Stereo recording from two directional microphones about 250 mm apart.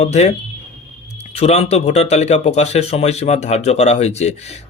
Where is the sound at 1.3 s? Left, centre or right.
Left.